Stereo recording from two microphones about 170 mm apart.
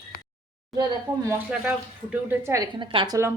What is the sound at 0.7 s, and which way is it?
A woman's voice, 15° right (ahead or behind).